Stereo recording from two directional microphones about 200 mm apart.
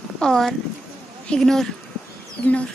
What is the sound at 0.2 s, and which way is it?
Speech, centre (ahead or behind).